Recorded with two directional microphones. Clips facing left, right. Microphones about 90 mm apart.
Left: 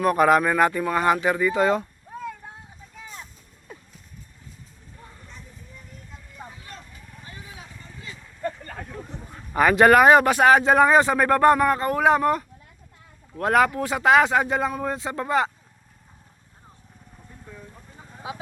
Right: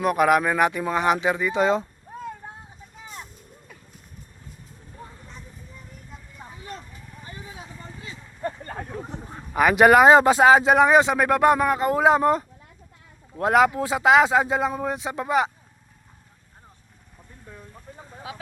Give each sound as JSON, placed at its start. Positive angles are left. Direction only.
{"t": 0.0, "sound": "speech", "side_deg": -10}
{"t": 8.4, "sound": "a sound", "side_deg": -30}
{"t": 9.5, "sound": "speech", "side_deg": -10}
{"t": 18.3, "sound": "speech", "side_deg": 25}